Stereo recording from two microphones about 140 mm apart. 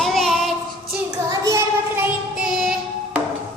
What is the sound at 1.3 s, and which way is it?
Child singing, 25° right (ahead or behind).